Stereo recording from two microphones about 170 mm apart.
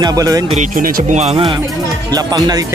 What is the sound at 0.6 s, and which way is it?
Speech, 55° right (ahead or behind).